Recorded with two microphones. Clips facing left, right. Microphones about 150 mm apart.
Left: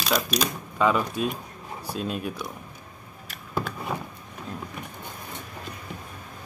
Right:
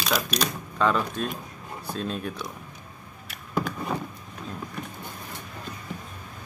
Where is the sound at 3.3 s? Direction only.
Centre (ahead or behind).